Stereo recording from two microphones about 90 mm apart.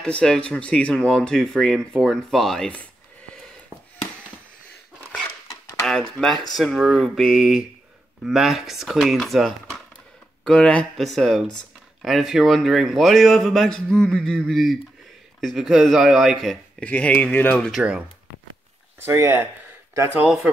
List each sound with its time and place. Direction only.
0.0 s speech: 10° left (ahead or behind)
5.8 s a man's voice: 5° left (ahead or behind)
10.4 s a man's voice: 10° left (ahead or behind)
16.8 s speech: 15° left (ahead or behind)
19.0 s speech: 30° right (ahead or behind)